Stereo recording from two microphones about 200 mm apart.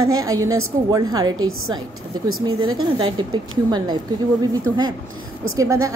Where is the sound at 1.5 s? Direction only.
90° right.